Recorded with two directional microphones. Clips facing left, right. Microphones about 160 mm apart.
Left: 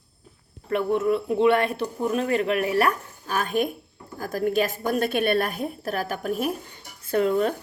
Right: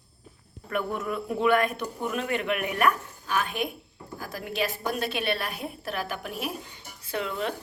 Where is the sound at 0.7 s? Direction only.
30° left (ahead or behind).